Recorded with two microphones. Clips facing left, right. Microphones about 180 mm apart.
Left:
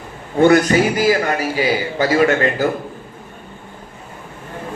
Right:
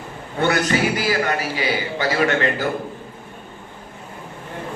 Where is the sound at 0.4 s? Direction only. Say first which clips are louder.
Left 7 dB; 45° left (ahead or behind).